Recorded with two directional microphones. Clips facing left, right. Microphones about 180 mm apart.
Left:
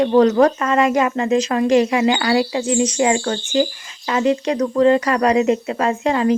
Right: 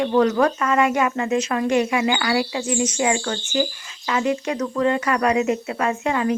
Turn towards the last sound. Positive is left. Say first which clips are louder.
# left 4 dB
turn(degrees=30)  # may be behind; listen again after turning